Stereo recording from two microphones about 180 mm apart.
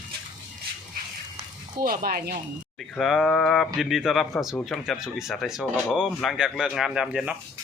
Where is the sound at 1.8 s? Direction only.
55° right (ahead or behind).